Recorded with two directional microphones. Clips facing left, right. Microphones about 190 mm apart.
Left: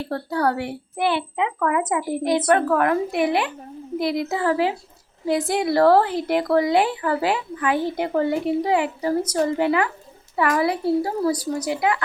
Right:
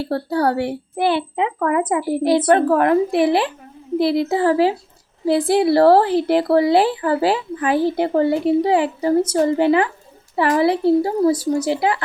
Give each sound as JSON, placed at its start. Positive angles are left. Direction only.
{"t": 0.0, "sound": "a woman's voice", "side_deg": -30}